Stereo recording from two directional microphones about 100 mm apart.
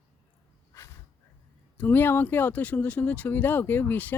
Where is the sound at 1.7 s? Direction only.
20° left (ahead or behind).